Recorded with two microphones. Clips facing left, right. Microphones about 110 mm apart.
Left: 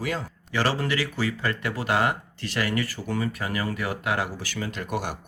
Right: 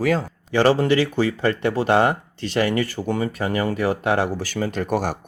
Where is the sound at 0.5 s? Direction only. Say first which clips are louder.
Right 9 dB; 25° right (ahead or behind).